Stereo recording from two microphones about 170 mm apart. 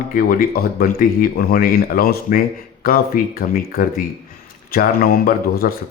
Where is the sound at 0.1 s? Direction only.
60° left (ahead or behind).